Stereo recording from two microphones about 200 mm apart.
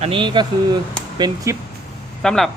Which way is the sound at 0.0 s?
25° right (ahead or behind).